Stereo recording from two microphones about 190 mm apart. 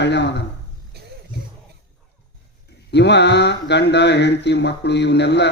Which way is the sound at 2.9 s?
65° left (ahead or behind).